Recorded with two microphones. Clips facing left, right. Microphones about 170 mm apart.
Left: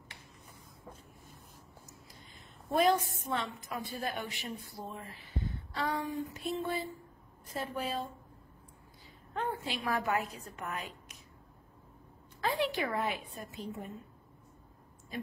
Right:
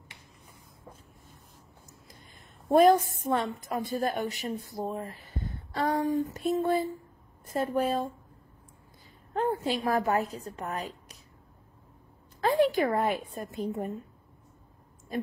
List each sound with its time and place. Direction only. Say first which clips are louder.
2.7 s a woman's voice: right 8 dB; 45° right (ahead or behind)
9.3 s a woman's voice: right 8 dB; 40° right (ahead or behind)
12.4 s a woman's voice: right 8 dB; 45° right (ahead or behind)